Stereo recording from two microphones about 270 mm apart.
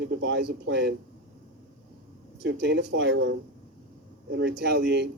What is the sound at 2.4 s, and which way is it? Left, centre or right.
Speech, right.